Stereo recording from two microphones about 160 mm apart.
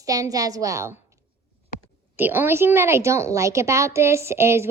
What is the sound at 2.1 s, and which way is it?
A woman's voice, 15° right (ahead or behind).